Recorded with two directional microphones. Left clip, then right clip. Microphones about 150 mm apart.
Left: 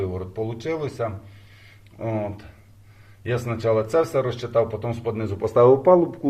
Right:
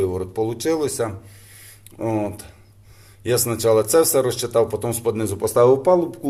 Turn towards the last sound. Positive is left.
turn(degrees=0)  # may be behind; listen again after turning